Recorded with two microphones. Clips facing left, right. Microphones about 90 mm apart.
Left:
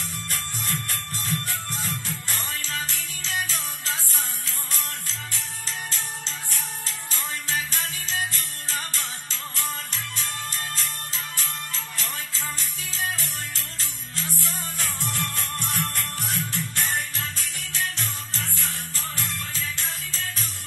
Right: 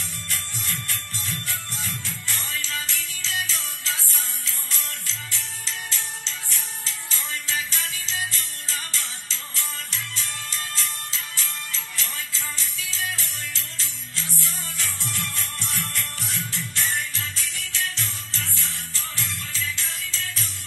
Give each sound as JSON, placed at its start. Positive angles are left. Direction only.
{"t": 0.3, "sound": "music", "side_deg": 45}